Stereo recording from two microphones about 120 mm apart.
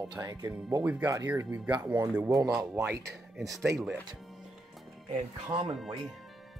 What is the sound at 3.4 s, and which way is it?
Speech, centre (ahead or behind).